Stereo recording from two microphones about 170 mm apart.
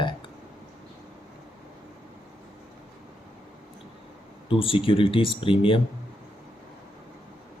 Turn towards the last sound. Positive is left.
turn(degrees=30)  # may be behind; listen again after turning